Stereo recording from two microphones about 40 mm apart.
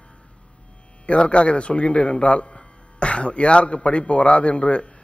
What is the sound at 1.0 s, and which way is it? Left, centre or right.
A man's voice, left.